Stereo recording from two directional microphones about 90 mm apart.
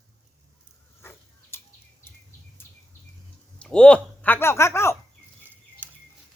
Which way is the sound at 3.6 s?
10° left (ahead or behind).